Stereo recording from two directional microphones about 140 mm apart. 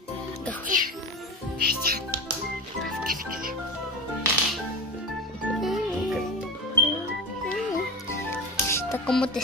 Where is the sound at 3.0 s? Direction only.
90° right.